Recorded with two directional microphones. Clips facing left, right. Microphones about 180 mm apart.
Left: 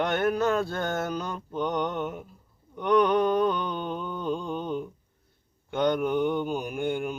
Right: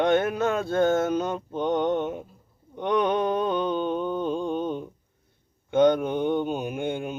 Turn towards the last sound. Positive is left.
turn(degrees=-20)  # may be behind; listen again after turning